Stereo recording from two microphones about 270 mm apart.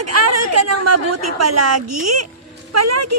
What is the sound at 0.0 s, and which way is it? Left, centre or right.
A woman's voice, right.